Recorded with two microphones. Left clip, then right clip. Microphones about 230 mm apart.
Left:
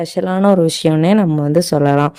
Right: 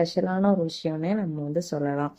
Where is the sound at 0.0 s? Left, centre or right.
Left.